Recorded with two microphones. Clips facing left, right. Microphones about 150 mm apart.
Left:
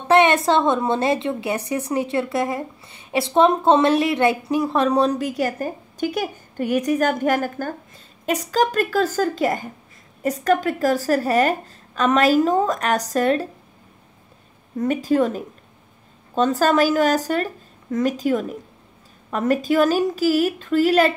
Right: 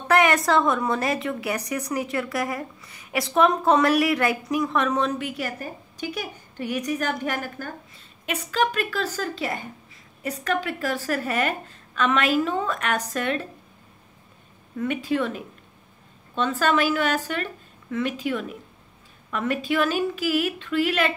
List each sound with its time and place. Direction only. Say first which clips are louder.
0.1 s a woman's voice: left 4 dB; 25° left (ahead or behind)
14.8 s a woman's voice: left 6 dB; 40° left (ahead or behind)